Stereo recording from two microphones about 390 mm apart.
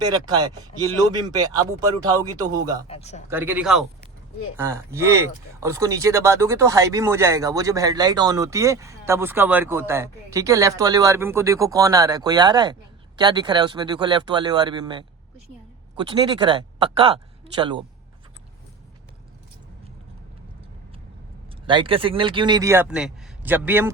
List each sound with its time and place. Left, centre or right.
0.0 s speech: centre
2.8 s a man's voice: centre
3.2 s a man's voice: centre
21.7 s speech: centre